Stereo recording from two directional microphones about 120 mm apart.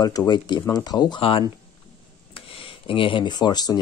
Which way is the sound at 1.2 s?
50° left (ahead or behind).